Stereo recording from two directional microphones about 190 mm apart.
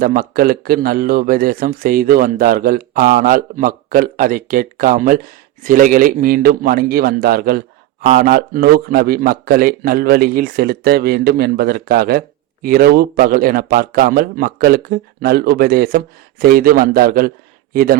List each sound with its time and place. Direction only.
0.0 s a man's voice: 50° right (ahead or behind)